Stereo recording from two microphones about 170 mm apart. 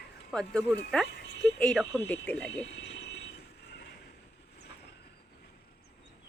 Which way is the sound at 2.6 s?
80° left.